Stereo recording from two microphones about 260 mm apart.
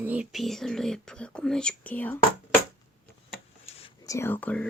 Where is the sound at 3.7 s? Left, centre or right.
Left.